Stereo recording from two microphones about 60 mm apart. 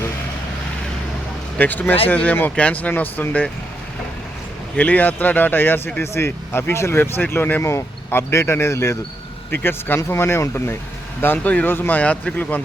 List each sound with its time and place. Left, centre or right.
1.5 s speech: left
4.8 s speech: left
7.6 s speech: left
9.5 s speech: left